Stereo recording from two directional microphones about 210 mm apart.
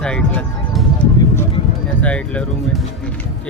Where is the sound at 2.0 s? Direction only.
5° left (ahead or behind).